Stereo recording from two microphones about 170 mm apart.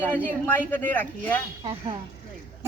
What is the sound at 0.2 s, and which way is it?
Speech, 10° left (ahead or behind).